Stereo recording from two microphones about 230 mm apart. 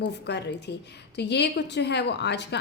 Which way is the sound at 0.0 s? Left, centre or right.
Left.